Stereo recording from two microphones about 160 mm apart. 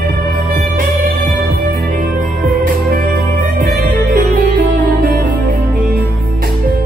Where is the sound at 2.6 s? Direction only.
65° right (ahead or behind).